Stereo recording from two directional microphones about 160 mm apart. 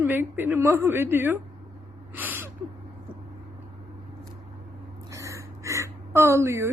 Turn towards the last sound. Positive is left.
turn(degrees=-15)  # may be behind; listen again after turning